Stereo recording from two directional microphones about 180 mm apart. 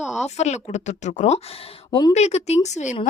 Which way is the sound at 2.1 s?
35° left (ahead or behind).